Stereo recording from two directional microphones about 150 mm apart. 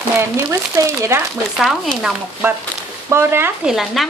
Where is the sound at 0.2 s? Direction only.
20° right (ahead or behind).